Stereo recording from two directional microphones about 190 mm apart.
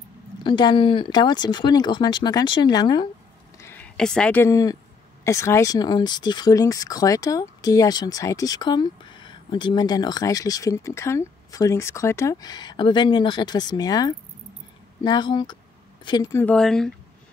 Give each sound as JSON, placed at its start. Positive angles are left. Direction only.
{"t": 0.4, "sound": "speech", "side_deg": 25}
{"t": 3.5, "sound": "speech", "side_deg": 10}